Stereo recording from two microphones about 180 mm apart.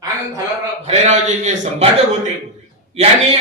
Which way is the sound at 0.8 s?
40° right (ahead or behind).